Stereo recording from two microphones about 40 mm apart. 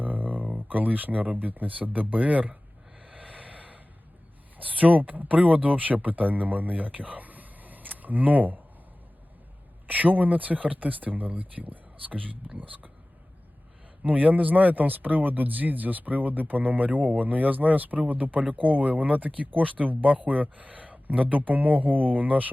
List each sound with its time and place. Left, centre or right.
0.0 s a sound: right
1.4 s speech: right
3.0 s a sound: right
3.3 s snort: right
4.5 s speech: right
9.8 s speech: right
14.0 s speech: right